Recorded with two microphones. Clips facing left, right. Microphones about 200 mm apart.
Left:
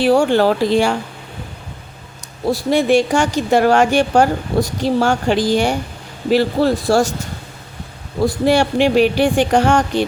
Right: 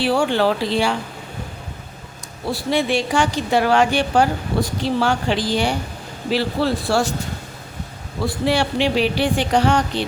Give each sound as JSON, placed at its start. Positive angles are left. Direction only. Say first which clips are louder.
{"t": 0.0, "sound": "a woman's voice", "louder": "left 5 dB", "side_deg": 45}
{"t": 2.5, "sound": "a woman's voice", "louder": "left 6 dB", "side_deg": 45}
{"t": 8.2, "sound": "a woman's voice", "louder": "left 5 dB", "side_deg": 45}